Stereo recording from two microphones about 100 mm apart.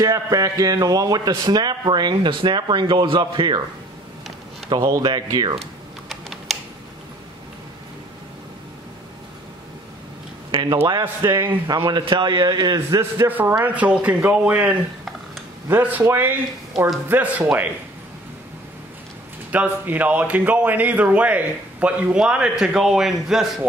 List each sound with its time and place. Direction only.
0.0 s speech: 35° right (ahead or behind); by 3.6 s 50° right (ahead or behind)
4.7 s speech: 45° right (ahead or behind)
5.6 s typing: centre (ahead or behind)
10.5 s speech: 50° right (ahead or behind)
11.2 s speech: 25° right (ahead or behind)
11.6 s speech: 45° right (ahead or behind)
12.0 s speech: 55° right (ahead or behind)
13.2 s speech: 20° right (ahead or behind)
19.5 s speech: 15° right (ahead or behind)